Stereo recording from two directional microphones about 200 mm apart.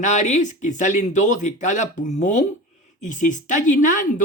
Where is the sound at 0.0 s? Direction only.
35° left (ahead or behind).